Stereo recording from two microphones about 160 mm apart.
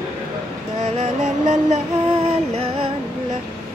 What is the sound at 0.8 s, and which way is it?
Music, 45° right (ahead or behind).